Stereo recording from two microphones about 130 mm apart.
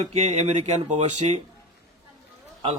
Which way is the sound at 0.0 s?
55° right (ahead or behind).